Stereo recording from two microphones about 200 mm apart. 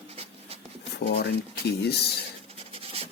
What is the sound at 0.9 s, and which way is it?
Speech, 55° left (ahead or behind).